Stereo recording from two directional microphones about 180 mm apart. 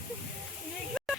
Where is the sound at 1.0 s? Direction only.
Centre (ahead or behind).